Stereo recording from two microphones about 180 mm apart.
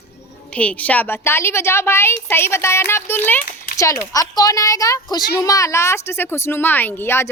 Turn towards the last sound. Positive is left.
turn(degrees=15)  # may be behind; listen again after turning